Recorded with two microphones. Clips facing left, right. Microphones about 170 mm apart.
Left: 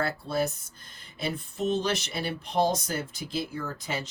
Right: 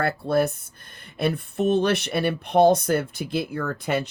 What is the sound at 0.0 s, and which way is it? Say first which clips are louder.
Speech: right 6 dB; 60° right (ahead or behind).